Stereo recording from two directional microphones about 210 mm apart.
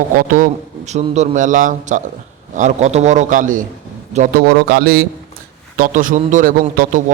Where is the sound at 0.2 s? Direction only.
40° right (ahead or behind).